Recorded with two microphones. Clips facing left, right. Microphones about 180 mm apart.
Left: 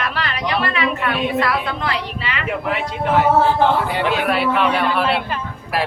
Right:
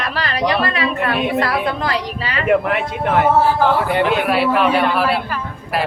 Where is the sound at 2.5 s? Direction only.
55° right (ahead or behind).